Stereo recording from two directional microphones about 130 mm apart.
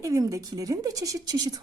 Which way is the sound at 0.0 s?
25° right (ahead or behind).